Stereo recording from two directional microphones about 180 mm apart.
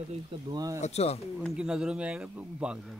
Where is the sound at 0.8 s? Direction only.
35° left (ahead or behind).